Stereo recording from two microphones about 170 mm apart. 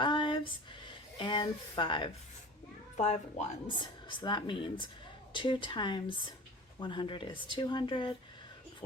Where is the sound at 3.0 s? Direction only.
45° left (ahead or behind).